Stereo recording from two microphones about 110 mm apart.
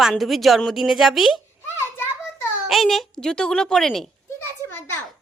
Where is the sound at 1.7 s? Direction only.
25° left (ahead or behind).